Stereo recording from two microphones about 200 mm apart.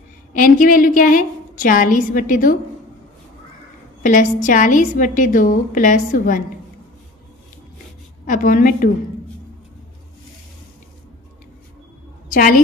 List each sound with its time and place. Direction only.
0.3 s a woman's voice: 40° left (ahead or behind)
4.0 s a woman's voice: 40° left (ahead or behind)
8.3 s a woman's voice: 40° left (ahead or behind)
12.3 s a woman's voice: 45° left (ahead or behind)